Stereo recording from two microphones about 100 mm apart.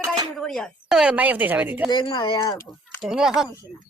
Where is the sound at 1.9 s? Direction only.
50° left (ahead or behind).